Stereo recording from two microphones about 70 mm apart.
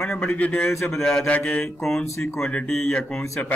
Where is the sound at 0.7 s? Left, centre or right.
Left.